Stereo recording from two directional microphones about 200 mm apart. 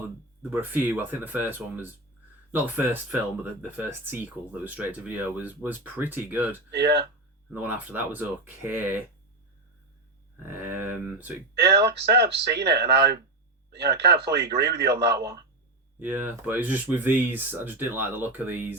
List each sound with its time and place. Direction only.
0.5 s speech: 10° right (ahead or behind)
6.7 s speech: 55° right (ahead or behind)
7.5 s speech: 10° right (ahead or behind)
10.7 s speech: 10° right (ahead or behind)
11.9 s speech: 55° right (ahead or behind)
16.0 s speech: 10° right (ahead or behind)